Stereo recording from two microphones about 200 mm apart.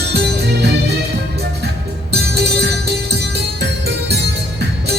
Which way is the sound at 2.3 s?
55° right (ahead or behind).